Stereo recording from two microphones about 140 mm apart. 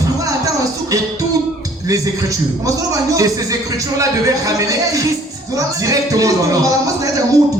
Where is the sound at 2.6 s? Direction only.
25° right (ahead or behind).